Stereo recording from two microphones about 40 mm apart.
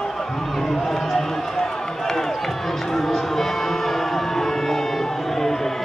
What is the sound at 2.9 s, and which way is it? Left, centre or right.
Music, centre.